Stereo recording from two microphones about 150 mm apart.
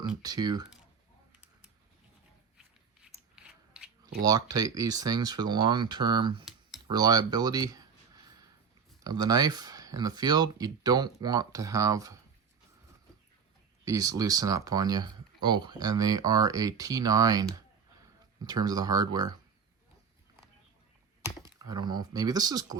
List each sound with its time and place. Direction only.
0.2 s speech: 25° right (ahead or behind)
3.3 s a sound: 5° right (ahead or behind)
4.2 s speech: 25° right (ahead or behind)
9.0 s speech: 25° right (ahead or behind)
13.8 s speech: 25° right (ahead or behind)
21.6 s speech: 25° right (ahead or behind)